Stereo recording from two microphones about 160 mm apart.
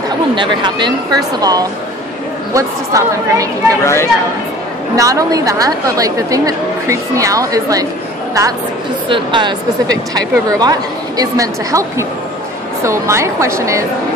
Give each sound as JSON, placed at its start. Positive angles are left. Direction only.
{"t": 0.4, "sound": "a woman's voice", "side_deg": -30}
{"t": 3.8, "sound": "speech", "side_deg": 15}
{"t": 4.9, "sound": "a woman's voice", "side_deg": -20}
{"t": 9.1, "sound": "a woman's voice", "side_deg": -30}